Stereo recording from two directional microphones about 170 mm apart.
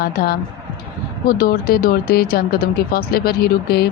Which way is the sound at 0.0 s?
65° left (ahead or behind).